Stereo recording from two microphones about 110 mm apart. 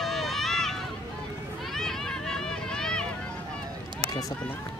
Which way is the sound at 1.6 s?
5° left (ahead or behind).